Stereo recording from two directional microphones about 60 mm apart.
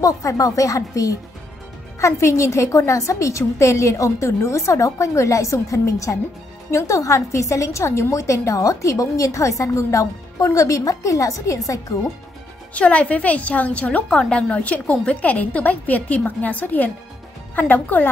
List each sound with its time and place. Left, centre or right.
0.0 s speech: left
2.0 s a woman's voice: left
12.7 s a woman's voice: left